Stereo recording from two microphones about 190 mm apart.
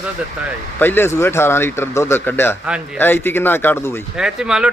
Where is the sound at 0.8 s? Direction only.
10° left (ahead or behind).